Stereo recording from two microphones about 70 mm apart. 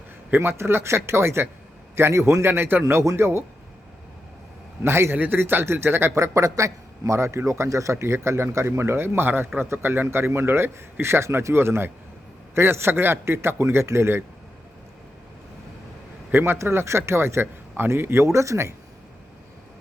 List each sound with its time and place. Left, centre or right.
0.3 s a man's voice: right
2.8 s a man's voice: right
4.8 s a man's voice: right
5.1 s a man's voice: right
6.1 s a man's voice: right
16.3 s a man's voice: right